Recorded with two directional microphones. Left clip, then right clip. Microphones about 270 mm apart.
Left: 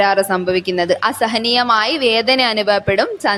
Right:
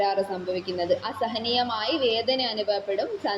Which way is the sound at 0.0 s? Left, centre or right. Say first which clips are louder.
Left 11 dB; left.